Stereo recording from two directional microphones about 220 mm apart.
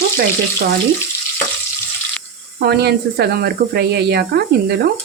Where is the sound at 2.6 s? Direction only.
50° right (ahead or behind).